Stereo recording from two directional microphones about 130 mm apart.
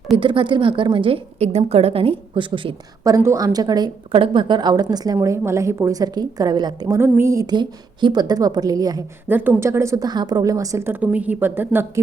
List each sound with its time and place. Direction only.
0.2 s a woman's voice: 40° right (ahead or behind)
3.0 s a woman's voice: 25° right (ahead or behind)
9.2 s a woman's voice: 15° right (ahead or behind)